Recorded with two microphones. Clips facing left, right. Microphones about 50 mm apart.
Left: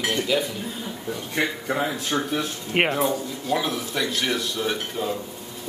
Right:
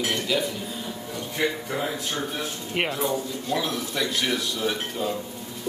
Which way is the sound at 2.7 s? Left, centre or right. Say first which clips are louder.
Left 5 dB; left.